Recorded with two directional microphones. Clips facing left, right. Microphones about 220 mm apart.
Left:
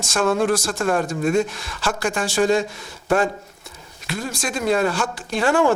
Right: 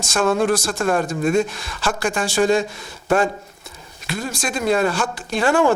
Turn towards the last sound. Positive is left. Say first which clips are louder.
# right 1 dB
turn(degrees=-20)  # may be behind; listen again after turning